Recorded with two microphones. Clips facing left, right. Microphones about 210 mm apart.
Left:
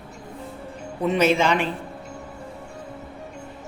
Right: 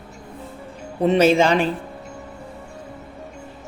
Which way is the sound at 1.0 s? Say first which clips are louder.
Right 4 dB; 30° right (ahead or behind).